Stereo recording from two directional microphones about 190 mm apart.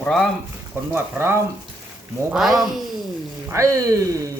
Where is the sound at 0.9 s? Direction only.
10° right (ahead or behind).